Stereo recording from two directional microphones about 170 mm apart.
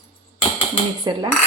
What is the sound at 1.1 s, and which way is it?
Speech, 25° right (ahead or behind).